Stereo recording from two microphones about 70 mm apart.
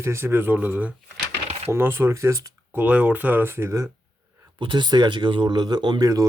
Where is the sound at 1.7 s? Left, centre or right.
Right.